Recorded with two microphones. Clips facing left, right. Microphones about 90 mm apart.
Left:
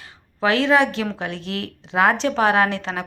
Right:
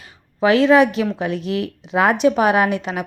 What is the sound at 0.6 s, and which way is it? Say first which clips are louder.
Speech: right 4 dB; 20° left (ahead or behind).